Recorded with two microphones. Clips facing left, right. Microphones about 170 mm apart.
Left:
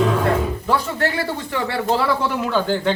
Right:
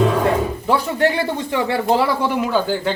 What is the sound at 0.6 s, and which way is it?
Speech, 20° right (ahead or behind).